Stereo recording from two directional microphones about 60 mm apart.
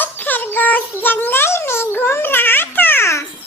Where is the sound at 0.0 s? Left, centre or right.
Left.